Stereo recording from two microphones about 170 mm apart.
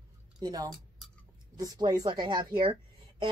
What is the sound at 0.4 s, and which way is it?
Speech, 20° right (ahead or behind).